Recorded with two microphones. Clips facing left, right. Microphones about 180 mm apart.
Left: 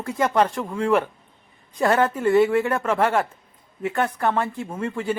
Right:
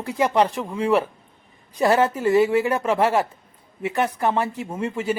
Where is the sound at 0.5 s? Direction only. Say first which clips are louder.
Even; 5° right (ahead or behind).